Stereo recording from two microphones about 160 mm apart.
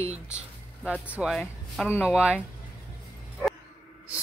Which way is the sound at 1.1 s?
5° right (ahead or behind).